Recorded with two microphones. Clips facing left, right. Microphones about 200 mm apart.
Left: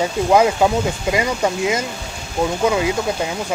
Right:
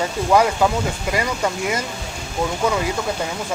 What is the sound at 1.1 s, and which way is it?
Speech, 20° left (ahead or behind).